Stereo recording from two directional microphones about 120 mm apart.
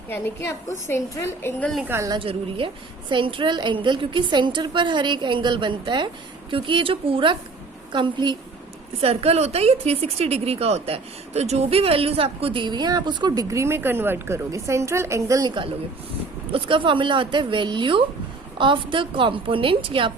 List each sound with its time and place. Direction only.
0.1 s a woman's voice: 20° left (ahead or behind)
1.8 s a woman's voice: 20° right (ahead or behind)
2.0 s a woman's voice: 45° right (ahead or behind)
9.0 s a woman's voice: 55° right (ahead or behind)